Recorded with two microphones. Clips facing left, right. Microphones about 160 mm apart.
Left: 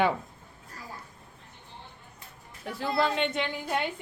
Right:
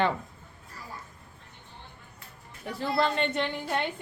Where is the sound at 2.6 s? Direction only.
Centre (ahead or behind).